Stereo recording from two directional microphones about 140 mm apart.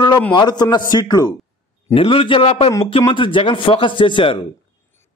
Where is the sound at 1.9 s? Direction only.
40° left (ahead or behind).